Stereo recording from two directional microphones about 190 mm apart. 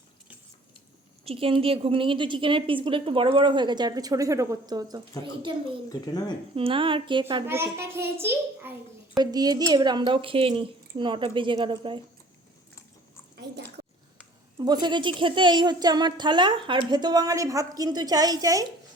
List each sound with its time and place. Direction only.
1.2 s a woman's voice: 30° right (ahead or behind)
5.9 s speech: 20° left (ahead or behind)
6.6 s a woman's voice: 30° right (ahead or behind)
7.4 s a child's voice: 15° right (ahead or behind)
14.6 s a woman's voice: 20° right (ahead or behind)